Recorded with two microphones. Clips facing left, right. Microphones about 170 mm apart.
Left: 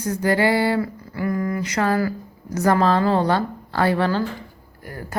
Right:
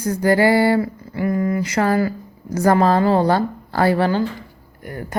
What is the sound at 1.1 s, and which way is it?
A woman's voice, 25° right (ahead or behind).